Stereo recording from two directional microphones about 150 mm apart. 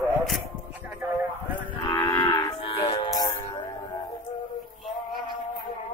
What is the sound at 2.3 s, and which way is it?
Music, 30° left (ahead or behind).